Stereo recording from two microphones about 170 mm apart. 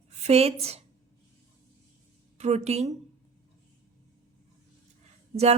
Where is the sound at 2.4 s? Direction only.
40° right (ahead or behind).